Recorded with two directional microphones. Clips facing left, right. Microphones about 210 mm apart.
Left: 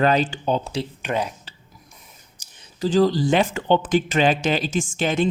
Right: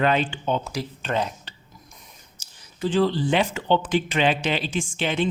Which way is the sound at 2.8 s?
40° left (ahead or behind).